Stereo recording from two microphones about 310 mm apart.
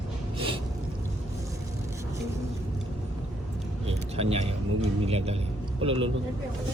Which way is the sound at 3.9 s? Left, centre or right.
Centre.